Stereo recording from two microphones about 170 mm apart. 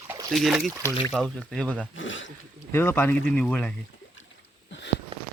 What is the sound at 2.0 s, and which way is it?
Speech, 90° left.